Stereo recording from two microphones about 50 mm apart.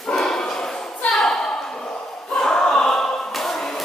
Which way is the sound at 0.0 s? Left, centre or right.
Centre.